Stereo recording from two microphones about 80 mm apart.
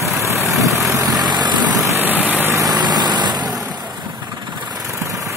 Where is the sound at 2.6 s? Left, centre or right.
Right.